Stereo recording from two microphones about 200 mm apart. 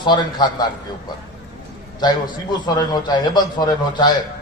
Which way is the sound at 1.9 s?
20° left (ahead or behind).